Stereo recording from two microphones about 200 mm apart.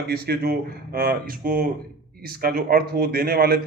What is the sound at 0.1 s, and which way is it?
Speech, 50° right (ahead or behind).